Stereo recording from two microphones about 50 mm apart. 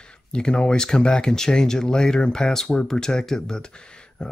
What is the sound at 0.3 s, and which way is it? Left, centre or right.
Speech, centre.